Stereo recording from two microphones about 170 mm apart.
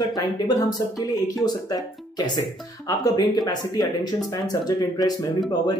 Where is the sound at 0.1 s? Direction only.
25° left (ahead or behind).